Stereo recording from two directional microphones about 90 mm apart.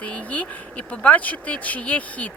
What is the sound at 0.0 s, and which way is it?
Speech, 15° left (ahead or behind).